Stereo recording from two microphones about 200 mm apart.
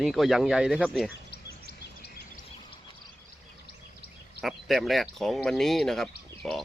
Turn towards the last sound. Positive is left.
turn(degrees=0)  # may be behind; listen again after turning